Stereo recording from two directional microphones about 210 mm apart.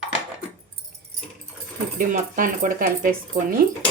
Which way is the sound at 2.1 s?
40° right (ahead or behind).